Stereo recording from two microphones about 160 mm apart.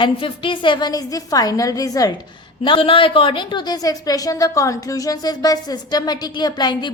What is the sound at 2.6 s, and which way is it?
A woman's voice, 35° left (ahead or behind).